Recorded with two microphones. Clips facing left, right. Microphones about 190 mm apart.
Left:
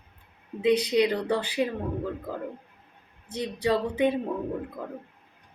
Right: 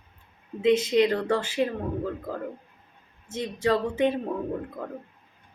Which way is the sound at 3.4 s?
15° left (ahead or behind).